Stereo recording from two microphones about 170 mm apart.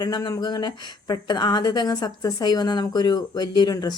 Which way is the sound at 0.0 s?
25° left (ahead or behind).